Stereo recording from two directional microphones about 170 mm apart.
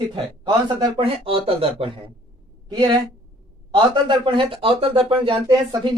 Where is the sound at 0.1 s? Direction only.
30° right (ahead or behind).